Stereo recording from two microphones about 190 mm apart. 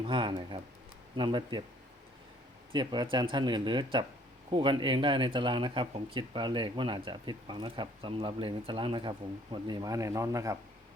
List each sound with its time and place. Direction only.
0.0 s speech: 25° right (ahead or behind)
2.7 s speech: 25° right (ahead or behind)